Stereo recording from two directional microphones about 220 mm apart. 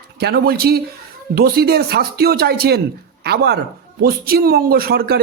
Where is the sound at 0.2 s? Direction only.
45° right (ahead or behind).